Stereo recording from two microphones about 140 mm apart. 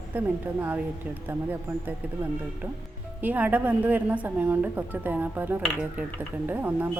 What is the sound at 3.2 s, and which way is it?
Cutlery, 10° right (ahead or behind).